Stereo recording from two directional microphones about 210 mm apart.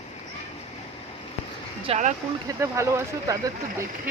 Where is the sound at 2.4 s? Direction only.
15° right (ahead or behind).